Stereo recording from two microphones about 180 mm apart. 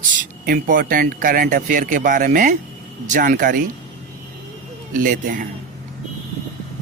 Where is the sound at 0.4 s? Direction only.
50° right (ahead or behind).